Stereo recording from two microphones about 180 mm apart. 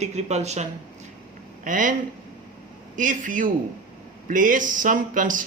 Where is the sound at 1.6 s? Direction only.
45° right (ahead or behind).